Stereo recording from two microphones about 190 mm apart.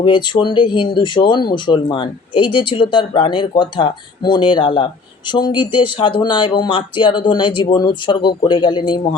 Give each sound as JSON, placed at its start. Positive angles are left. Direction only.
{"t": 0.0, "sound": "speech", "side_deg": 25}